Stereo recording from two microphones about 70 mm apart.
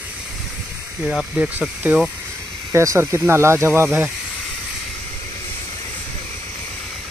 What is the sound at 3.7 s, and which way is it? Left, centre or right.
Speech, right.